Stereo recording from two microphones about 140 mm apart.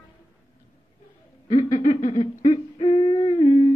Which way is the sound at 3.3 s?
40° left (ahead or behind).